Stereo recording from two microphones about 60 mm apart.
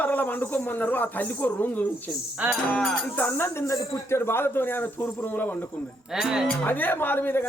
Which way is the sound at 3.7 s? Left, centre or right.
Left.